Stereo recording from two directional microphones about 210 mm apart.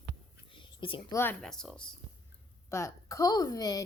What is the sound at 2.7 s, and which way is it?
A woman's voice, 15° left (ahead or behind).